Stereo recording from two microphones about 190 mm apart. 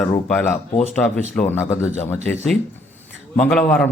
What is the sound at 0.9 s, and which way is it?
A man's voice, 5° left (ahead or behind).